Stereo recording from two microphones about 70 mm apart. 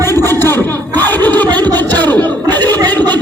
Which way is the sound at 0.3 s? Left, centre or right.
Left.